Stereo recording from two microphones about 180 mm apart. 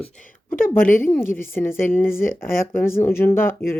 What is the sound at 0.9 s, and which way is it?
Speech, 15° left (ahead or behind).